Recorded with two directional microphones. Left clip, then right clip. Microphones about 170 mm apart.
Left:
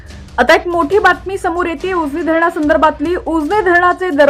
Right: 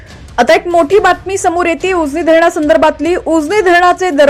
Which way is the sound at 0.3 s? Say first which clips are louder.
Right 2 dB; 20° right (ahead or behind).